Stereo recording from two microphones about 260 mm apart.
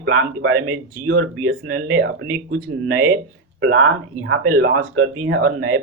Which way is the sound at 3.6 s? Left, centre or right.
Right.